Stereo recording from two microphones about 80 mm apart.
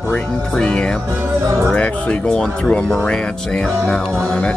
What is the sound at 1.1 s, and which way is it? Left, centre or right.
Speech, right.